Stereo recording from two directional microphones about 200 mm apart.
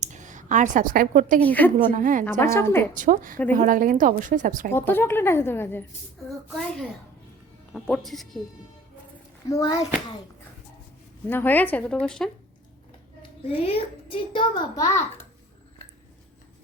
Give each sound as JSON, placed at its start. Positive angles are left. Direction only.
{"t": 0.0, "sound": "a woman's voice", "side_deg": -40}
{"t": 1.4, "sound": "speech", "side_deg": 10}
{"t": 1.9, "sound": "a woman's voice", "side_deg": -40}
{"t": 2.4, "sound": "speech", "side_deg": 15}
{"t": 2.9, "sound": "speech", "side_deg": -40}
{"t": 4.7, "sound": "speech", "side_deg": 10}
{"t": 9.5, "sound": "speech", "side_deg": 15}
{"t": 11.3, "sound": "speech", "side_deg": 10}
{"t": 13.6, "sound": "a child's voice", "side_deg": 30}